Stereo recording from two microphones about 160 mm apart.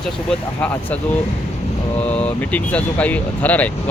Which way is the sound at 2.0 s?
10° left (ahead or behind).